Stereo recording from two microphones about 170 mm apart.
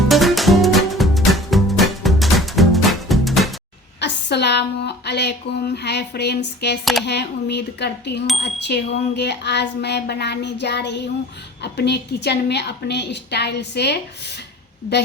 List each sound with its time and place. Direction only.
0.1 s music: centre (ahead or behind)
4.0 s speech: 80° left
8.4 s speech: 90° left